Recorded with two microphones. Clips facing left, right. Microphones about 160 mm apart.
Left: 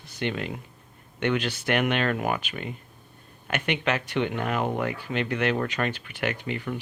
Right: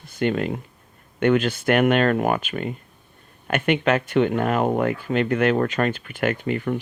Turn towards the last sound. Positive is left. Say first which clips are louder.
# right 6 dB
turn(degrees=-50)  # may be behind; listen again after turning